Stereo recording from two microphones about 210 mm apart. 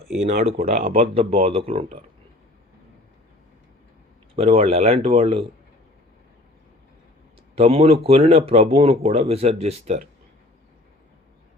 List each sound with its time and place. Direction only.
0.3 s speech: 35° right (ahead or behind)
4.4 s speech: 30° right (ahead or behind)
7.5 s speech: 30° right (ahead or behind)